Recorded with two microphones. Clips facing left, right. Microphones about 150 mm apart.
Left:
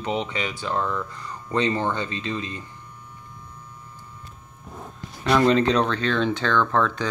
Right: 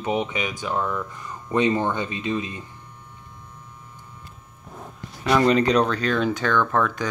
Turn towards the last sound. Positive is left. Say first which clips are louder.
# even
turn(degrees=-10)  # may be behind; listen again after turning